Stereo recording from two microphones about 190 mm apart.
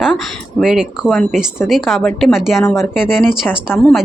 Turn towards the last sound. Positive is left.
turn(degrees=5)  # may be behind; listen again after turning